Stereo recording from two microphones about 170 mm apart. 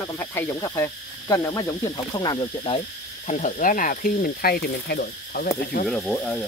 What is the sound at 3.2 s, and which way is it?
Speech, 45° left (ahead or behind).